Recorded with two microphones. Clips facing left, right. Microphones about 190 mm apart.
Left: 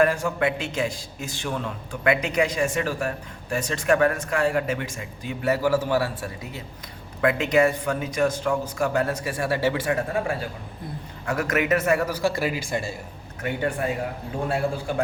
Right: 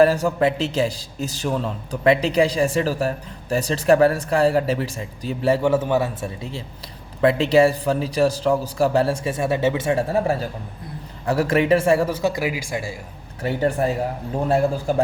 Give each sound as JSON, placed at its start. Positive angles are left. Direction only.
{"t": 0.0, "sound": "a man's voice", "side_deg": -35}
{"t": 13.4, "sound": "a man's voice", "side_deg": -35}